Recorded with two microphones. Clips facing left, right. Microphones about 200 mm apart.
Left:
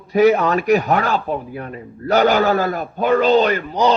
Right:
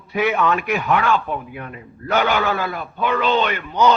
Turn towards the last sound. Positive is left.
turn(degrees=35)  # may be behind; listen again after turning